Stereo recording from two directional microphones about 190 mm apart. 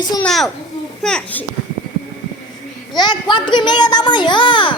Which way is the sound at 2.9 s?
20° left (ahead or behind).